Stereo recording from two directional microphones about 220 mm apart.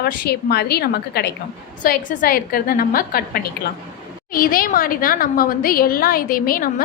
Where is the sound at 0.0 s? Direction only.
45° left (ahead or behind).